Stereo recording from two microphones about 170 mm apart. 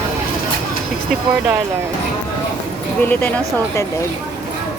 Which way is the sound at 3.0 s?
10° left (ahead or behind).